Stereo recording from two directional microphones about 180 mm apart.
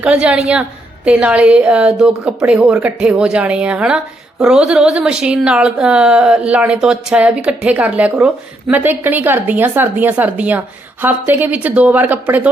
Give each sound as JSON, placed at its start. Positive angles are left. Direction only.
{"t": 0.0, "sound": "speech", "side_deg": -5}